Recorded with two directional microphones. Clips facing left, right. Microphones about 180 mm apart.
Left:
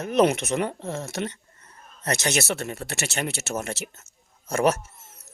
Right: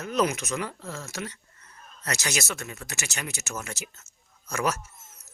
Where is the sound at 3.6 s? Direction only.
55° left (ahead or behind).